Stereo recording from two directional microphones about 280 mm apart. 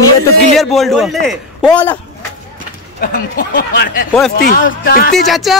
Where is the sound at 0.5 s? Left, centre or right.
Centre.